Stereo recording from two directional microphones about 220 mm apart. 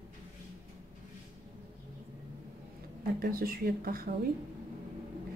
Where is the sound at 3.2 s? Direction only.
40° right (ahead or behind).